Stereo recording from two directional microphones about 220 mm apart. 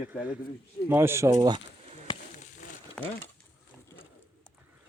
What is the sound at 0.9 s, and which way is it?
Speech, 10° right (ahead or behind).